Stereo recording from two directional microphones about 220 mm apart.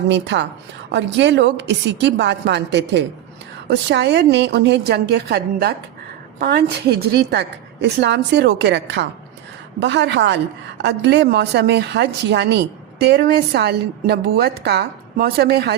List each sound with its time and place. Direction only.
0.1 s a woman's voice: 55° right (ahead or behind)